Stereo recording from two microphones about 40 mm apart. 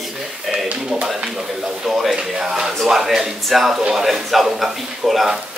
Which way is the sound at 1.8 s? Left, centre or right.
Centre.